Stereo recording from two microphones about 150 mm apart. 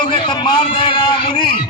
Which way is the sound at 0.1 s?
30° left (ahead or behind).